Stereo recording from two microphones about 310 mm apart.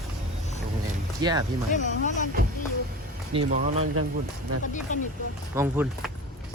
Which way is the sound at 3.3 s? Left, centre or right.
Centre.